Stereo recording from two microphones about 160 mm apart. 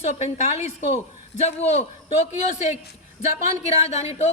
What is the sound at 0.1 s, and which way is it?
Speech, 45° left (ahead or behind).